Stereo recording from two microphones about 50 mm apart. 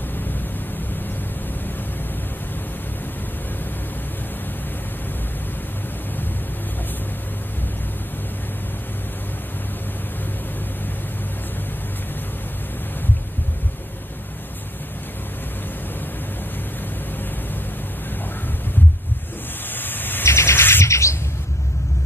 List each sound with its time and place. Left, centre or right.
19.7 s vehicle: left
20.2 s bird: left
20.8 s bird: left